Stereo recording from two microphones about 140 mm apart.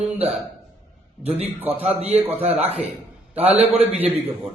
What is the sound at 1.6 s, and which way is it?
A man's voice, 45° right (ahead or behind).